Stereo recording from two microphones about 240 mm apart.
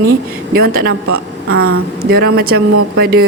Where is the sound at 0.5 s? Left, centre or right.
Right.